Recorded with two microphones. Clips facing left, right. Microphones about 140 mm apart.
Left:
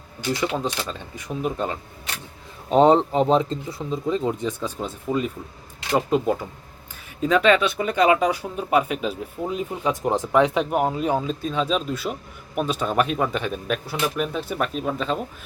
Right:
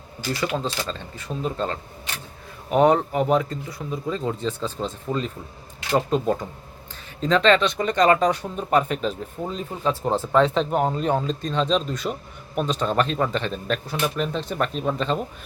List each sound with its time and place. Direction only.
0.3 s speech: 20° left (ahead or behind)
2.6 s speech: 25° left (ahead or behind); by 15.2 s 5° left (ahead or behind)